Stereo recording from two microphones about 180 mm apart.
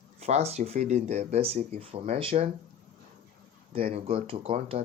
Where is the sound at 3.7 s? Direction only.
30° right (ahead or behind).